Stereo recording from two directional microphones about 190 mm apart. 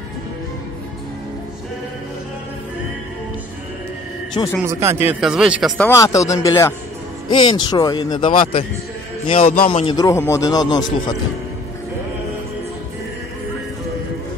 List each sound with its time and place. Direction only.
4.3 s speech: 20° left (ahead or behind)
4.6 s speech: 15° right (ahead or behind)
5.2 s speech: 5° right (ahead or behind)
5.8 s speech: 15° left (ahead or behind)
9.7 s speech: 30° left (ahead or behind)